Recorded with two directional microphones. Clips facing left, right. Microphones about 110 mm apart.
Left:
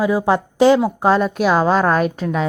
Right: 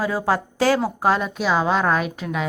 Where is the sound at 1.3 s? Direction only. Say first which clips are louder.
Left 5 dB; 50° left (ahead or behind).